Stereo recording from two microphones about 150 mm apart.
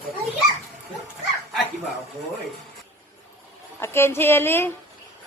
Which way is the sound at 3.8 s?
15° left (ahead or behind).